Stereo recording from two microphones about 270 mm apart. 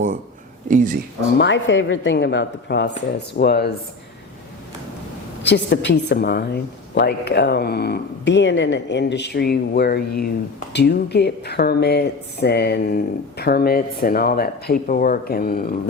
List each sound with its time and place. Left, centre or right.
1.4 s speech: left
5.4 s speech: left